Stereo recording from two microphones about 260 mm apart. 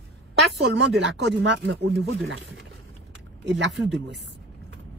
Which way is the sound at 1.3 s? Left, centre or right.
Right.